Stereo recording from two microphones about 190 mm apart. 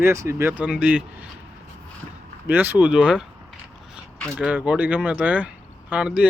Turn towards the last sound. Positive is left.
turn(degrees=-5)  # may be behind; listen again after turning